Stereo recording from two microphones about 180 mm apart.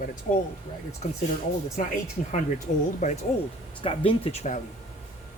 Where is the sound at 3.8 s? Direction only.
30° left (ahead or behind).